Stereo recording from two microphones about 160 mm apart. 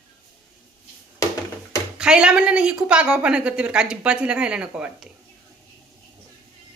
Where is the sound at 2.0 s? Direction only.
5° right (ahead or behind).